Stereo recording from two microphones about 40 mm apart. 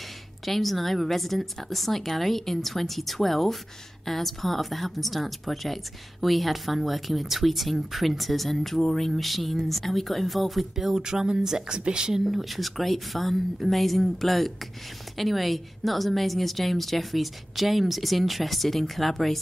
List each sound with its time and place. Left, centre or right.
0.5 s speech: centre
11.0 s speech: centre
12.3 s speech: centre